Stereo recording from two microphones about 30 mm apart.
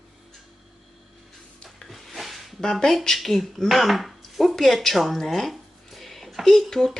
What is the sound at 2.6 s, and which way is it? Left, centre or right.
Speech, centre.